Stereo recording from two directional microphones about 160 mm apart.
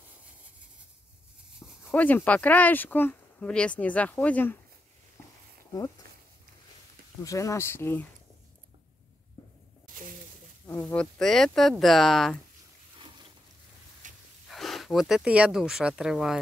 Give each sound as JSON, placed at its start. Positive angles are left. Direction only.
{"t": 1.9, "sound": "speech", "side_deg": 10}
{"t": 7.2, "sound": "speech", "side_deg": 20}
{"t": 10.9, "sound": "speech", "side_deg": 5}
{"t": 14.0, "sound": "a sound", "side_deg": -50}
{"t": 14.5, "sound": "speech", "side_deg": 0}